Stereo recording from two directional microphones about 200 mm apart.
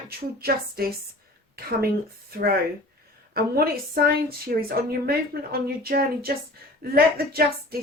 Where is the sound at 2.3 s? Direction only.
50° right (ahead or behind).